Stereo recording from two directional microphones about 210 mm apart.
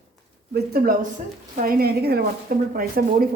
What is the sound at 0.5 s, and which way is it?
Speech, 45° right (ahead or behind).